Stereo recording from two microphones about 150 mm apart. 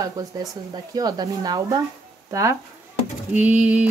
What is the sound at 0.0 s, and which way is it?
Speech, 25° right (ahead or behind).